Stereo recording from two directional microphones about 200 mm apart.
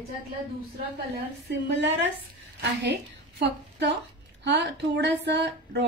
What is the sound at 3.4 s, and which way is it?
A woman's voice, 60° right (ahead or behind).